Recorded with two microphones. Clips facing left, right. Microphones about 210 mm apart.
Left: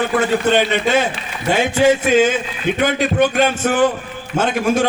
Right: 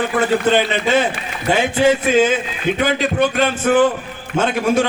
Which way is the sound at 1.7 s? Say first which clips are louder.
Left 1 dB; 50° left (ahead or behind).